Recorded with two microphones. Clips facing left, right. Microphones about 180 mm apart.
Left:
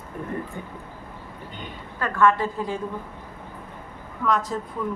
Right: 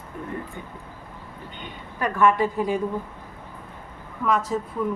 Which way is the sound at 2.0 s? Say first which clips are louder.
Right 1 dB; 15° right (ahead or behind).